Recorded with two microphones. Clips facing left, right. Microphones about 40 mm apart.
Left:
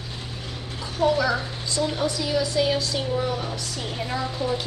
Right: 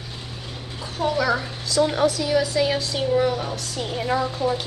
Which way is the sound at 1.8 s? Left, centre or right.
Right.